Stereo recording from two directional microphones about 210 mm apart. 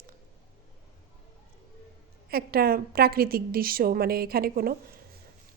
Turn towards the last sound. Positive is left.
turn(degrees=-45)  # may be behind; listen again after turning